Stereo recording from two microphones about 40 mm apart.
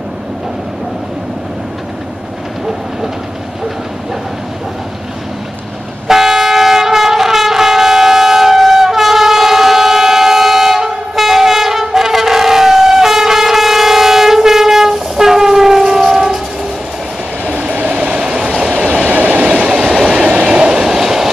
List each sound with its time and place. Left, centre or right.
6.0 s train: centre
17.5 s train: right
18.2 s train: centre
19.0 s train: right; by 21.3 s centre